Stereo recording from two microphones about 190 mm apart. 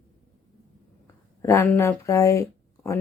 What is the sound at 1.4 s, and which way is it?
Speech, 15° left (ahead or behind).